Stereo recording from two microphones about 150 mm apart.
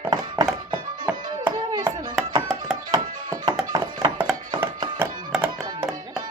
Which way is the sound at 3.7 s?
25° right (ahead or behind).